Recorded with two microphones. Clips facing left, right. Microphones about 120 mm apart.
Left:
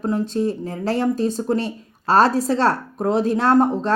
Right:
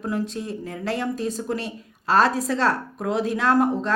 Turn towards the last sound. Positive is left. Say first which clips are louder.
# left 3 dB
turn(degrees=30)  # may be behind; listen again after turning